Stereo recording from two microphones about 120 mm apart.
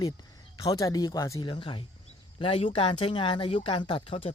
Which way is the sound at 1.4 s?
45° left (ahead or behind).